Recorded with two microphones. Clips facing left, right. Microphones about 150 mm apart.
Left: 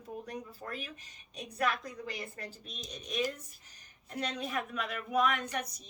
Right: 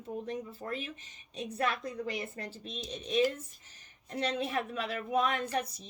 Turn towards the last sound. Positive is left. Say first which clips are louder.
# right 1 dB
turn(degrees=-30)  # may be behind; listen again after turning